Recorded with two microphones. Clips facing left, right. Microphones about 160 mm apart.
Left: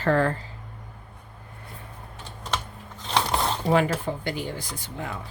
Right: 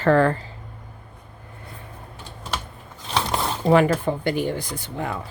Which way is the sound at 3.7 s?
65° right (ahead or behind).